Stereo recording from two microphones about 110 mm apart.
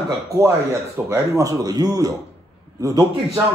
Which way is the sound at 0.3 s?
25° right (ahead or behind).